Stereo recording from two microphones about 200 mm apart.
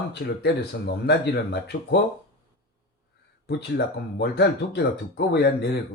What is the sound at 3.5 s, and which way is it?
Speech, 55° left (ahead or behind).